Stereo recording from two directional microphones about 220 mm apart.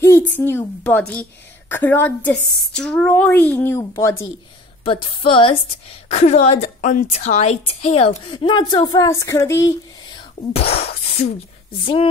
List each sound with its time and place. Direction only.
0.4 s a woman's voice: 10° left (ahead or behind)
4.8 s a woman's voice: 25° left (ahead or behind)
10.5 s a woman's voice: 30° left (ahead or behind)